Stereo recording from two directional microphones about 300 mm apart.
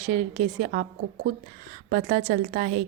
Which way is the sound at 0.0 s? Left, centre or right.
Right.